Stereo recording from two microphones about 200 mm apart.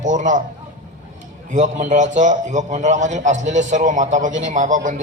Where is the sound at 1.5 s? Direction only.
40° right (ahead or behind).